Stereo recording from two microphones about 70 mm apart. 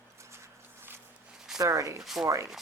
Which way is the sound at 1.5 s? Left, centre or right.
Right.